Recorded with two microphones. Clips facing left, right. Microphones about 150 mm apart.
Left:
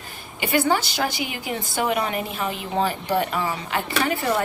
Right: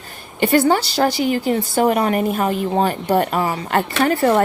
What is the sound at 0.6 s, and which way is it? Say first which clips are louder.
Speech: right 4 dB; 40° right (ahead or behind).